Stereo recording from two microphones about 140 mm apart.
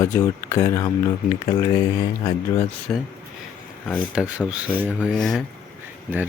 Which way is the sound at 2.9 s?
15° left (ahead or behind).